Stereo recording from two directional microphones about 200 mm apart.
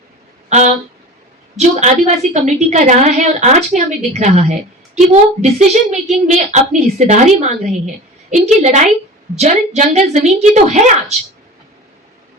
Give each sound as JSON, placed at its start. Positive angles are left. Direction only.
{"t": 1.5, "sound": "a woman's voice", "side_deg": -35}